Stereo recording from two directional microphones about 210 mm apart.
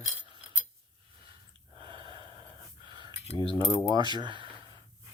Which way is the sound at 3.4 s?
15° right (ahead or behind).